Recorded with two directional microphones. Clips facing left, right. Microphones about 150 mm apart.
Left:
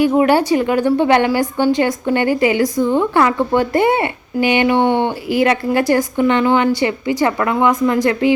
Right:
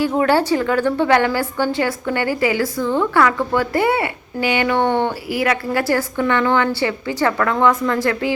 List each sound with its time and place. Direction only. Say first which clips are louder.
0.0 s a woman's voice: left 4 dB; 15° left (ahead or behind)